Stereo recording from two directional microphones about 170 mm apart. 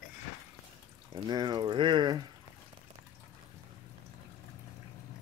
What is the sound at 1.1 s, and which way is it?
Speech, 25° right (ahead or behind).